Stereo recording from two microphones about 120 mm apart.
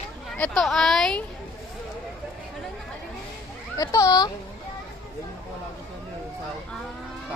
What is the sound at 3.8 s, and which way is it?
Speech, 30° left (ahead or behind).